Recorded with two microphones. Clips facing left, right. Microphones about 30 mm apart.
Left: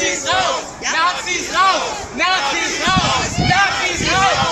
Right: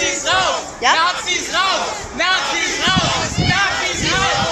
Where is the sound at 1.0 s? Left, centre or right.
Centre.